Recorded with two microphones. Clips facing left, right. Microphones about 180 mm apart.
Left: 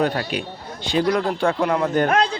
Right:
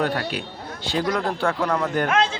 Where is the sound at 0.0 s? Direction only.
20° left (ahead or behind).